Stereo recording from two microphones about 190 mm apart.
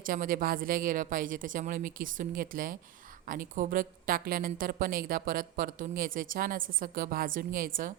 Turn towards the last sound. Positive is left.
turn(degrees=-50)  # may be behind; listen again after turning